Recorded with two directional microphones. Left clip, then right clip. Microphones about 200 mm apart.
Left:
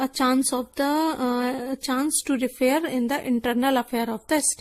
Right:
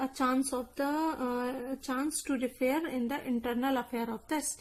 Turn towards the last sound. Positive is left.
turn(degrees=40)  # may be behind; listen again after turning